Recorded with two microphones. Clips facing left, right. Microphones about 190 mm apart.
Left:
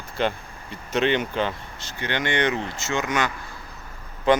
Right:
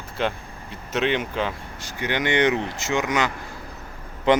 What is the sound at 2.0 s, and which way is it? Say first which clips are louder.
Speech: right 3 dB; 15° right (ahead or behind).